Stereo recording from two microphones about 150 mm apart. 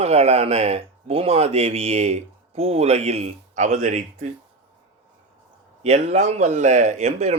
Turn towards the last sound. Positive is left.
turn(degrees=-45)  # may be behind; listen again after turning